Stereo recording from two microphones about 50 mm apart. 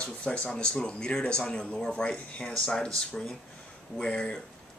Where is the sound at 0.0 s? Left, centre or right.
Left.